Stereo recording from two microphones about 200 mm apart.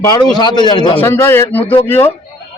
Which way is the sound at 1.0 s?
10° left (ahead or behind).